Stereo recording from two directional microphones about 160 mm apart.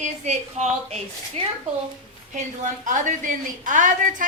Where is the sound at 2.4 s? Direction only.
50° right (ahead or behind).